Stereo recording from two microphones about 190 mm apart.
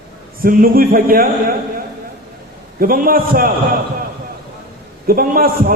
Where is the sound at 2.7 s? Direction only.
50° right (ahead or behind).